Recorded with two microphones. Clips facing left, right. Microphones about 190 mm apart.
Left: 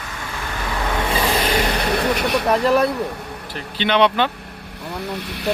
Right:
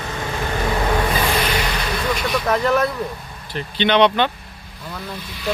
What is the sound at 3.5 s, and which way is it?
Speech, 5° left (ahead or behind).